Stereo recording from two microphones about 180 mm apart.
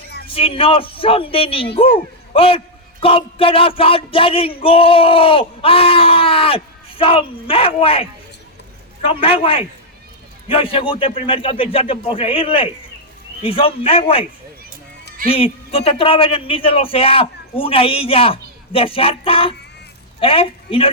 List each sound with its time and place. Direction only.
0.3 s a man's voice: 30° left (ahead or behind)
9.0 s a man's voice: 30° left (ahead or behind)
15.3 s a man's voice: 30° left (ahead or behind)